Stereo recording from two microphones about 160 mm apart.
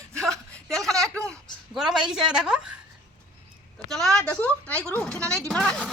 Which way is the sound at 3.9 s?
5° left (ahead or behind).